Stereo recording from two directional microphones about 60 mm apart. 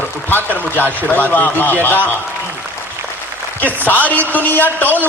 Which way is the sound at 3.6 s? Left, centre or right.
Left.